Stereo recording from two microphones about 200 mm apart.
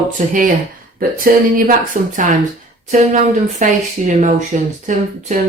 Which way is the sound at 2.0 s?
40° right (ahead or behind).